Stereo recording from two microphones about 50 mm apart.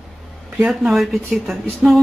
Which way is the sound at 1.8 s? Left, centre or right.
Centre.